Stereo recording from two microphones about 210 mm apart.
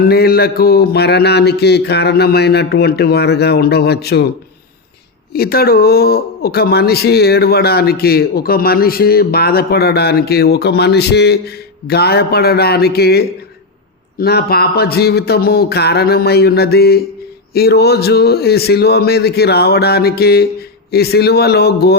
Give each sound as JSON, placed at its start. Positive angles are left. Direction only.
{"t": 0.0, "sound": "speech", "side_deg": 45}
{"t": 5.3, "sound": "speech", "side_deg": 45}